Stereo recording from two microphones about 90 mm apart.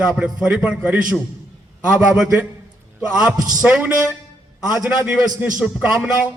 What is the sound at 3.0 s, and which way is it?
Speech, 10° right (ahead or behind).